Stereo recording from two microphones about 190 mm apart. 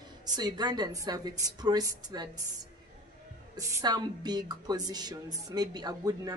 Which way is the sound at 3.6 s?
20° right (ahead or behind).